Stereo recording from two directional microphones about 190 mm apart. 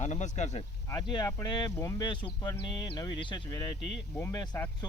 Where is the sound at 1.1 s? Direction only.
20° left (ahead or behind).